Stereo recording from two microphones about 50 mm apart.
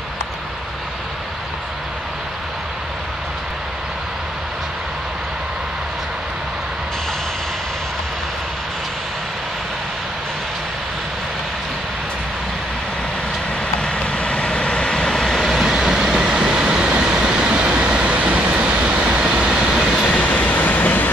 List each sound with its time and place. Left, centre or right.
13.7 s vehicle: centre
20.2 s train: left